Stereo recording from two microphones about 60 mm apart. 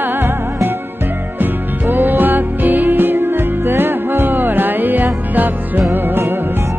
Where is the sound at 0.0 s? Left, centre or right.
Right.